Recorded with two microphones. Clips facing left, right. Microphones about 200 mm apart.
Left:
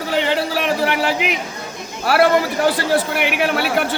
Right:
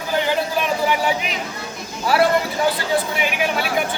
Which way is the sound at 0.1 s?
75° left (ahead or behind).